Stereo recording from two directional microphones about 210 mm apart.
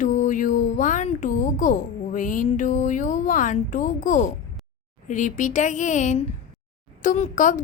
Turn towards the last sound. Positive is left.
turn(degrees=35)  # may be behind; listen again after turning